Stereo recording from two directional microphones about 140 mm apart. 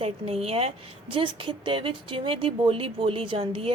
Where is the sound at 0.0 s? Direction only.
45° right (ahead or behind).